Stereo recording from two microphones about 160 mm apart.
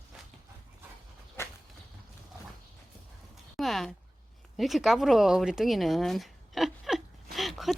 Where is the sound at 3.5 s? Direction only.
Centre (ahead or behind).